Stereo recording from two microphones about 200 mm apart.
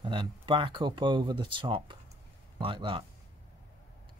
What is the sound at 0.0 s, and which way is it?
Speech, 25° right (ahead or behind).